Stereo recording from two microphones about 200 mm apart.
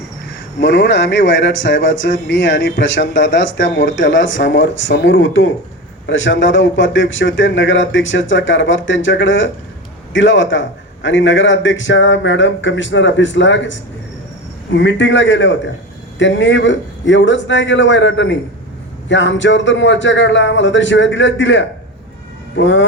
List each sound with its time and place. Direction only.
0.6 s a man's voice: 60° left (ahead or behind)